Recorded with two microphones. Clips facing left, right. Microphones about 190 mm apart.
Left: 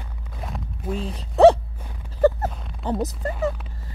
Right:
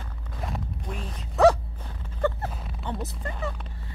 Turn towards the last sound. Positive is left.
turn(degrees=40)  # may be behind; listen again after turning